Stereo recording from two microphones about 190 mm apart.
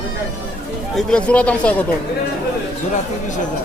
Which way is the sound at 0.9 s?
5° left (ahead or behind).